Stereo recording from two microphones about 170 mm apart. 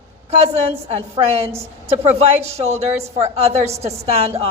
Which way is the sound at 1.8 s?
40° right (ahead or behind).